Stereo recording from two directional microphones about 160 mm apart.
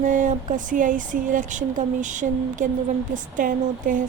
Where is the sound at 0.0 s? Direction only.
55° right (ahead or behind).